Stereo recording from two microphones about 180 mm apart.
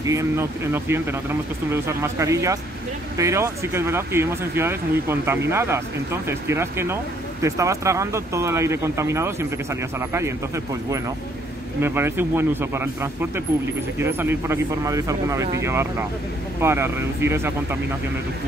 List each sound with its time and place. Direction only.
0.0 s speech: 15° right (ahead or behind)